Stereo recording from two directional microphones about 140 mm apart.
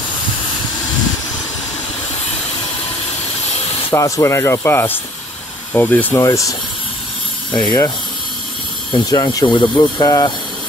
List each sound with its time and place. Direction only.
3.9 s speech: 20° left (ahead or behind)
6.1 s speech: 25° left (ahead or behind)
7.5 s speech: 25° left (ahead or behind)
8.9 s speech: 30° left (ahead or behind)